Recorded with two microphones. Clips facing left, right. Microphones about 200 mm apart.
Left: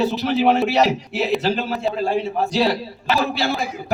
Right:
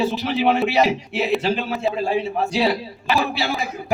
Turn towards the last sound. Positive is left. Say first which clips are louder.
# left 1 dB
turn(degrees=0)  # may be behind; listen again after turning